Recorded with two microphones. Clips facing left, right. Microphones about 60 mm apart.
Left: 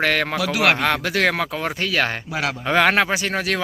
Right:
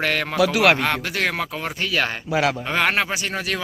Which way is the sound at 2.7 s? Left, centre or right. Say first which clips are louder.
Left 4 dB; left.